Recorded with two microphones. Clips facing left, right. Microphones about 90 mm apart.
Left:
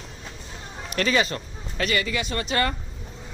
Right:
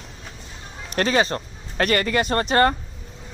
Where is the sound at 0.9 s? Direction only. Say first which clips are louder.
Right 3 dB; 40° right (ahead or behind).